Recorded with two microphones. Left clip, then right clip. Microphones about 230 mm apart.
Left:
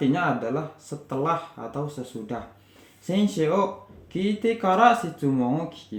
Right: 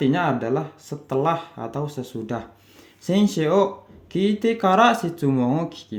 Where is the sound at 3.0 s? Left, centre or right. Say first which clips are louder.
Right 3 dB; right.